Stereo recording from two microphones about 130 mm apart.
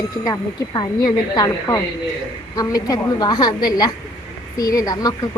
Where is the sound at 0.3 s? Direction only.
30° left (ahead or behind).